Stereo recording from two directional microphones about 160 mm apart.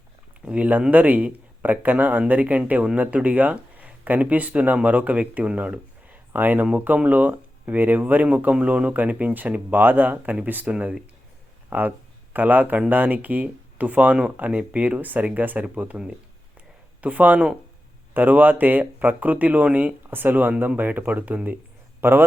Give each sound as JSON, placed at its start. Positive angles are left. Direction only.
{"t": 0.4, "sound": "speech", "side_deg": -10}